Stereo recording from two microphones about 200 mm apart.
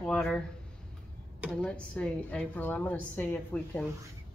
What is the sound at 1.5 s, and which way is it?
A woman's voice, 5° left (ahead or behind).